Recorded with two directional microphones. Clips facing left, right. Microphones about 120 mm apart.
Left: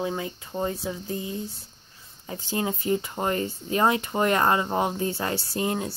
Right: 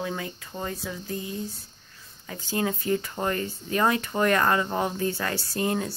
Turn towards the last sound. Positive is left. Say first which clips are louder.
# even
turn(degrees=20)  # may be behind; listen again after turning